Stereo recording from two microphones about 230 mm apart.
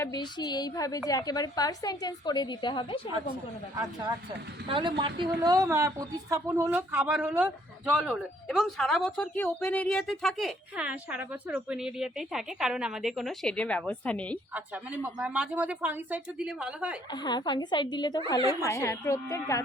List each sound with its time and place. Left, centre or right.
0.0 s a woman's voice: centre
4.7 s a woman's voice: right; by 14.3 s centre
14.5 s speech: centre
17.1 s a woman's voice: centre